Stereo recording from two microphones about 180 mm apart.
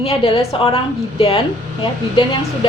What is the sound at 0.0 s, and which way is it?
Speech, 35° left (ahead or behind).